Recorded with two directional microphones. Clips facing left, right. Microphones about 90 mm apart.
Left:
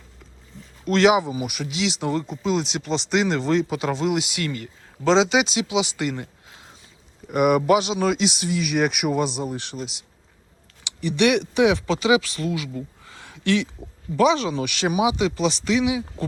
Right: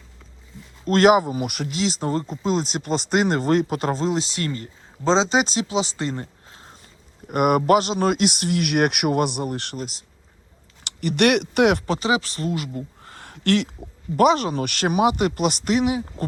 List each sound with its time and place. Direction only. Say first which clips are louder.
0.9 s speech: right 2 dB; 45° right (ahead or behind)
11.9 s speech: left 2 dB; 40° right (ahead or behind)